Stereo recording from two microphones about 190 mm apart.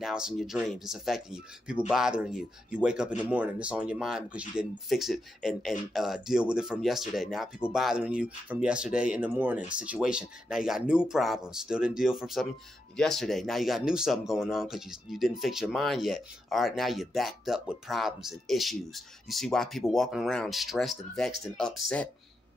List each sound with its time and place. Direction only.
0.0 s speech: centre (ahead or behind)